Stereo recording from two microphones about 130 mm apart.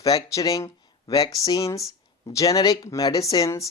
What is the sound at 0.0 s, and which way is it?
Speech, 25° left (ahead or behind).